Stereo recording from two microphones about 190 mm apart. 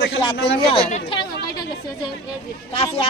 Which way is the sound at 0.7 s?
30° left (ahead or behind).